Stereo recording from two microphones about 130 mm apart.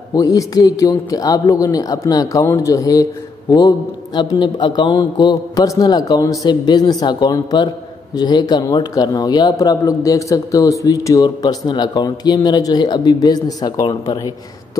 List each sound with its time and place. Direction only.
0.1 s a man's voice: 25° left (ahead or behind)